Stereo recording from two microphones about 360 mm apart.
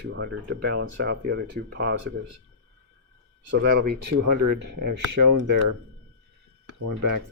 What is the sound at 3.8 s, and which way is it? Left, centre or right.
Speech, right.